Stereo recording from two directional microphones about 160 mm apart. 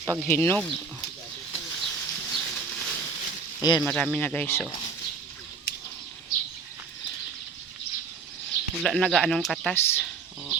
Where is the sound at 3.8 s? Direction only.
5° left (ahead or behind).